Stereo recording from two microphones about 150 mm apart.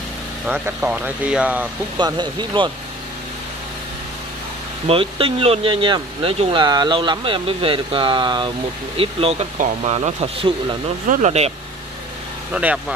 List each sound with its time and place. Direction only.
0.5 s speech: 10° right (ahead or behind)
2.0 s speech: 30° right (ahead or behind)
4.8 s speech: 40° right (ahead or behind)
11.1 s speech: 50° right (ahead or behind)
12.5 s speech: 5° right (ahead or behind)